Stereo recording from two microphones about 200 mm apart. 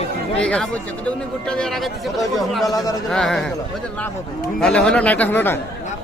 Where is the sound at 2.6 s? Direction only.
15° left (ahead or behind).